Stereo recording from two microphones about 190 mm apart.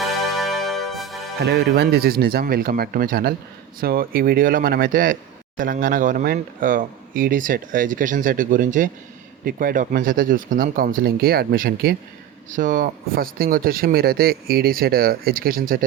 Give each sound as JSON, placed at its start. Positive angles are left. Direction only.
{"t": 0.0, "sound": "music", "side_deg": 0}
{"t": 1.4, "sound": "speech", "side_deg": -60}